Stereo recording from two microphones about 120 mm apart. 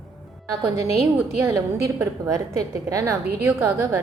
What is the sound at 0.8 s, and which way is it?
Speech, 65° left (ahead or behind).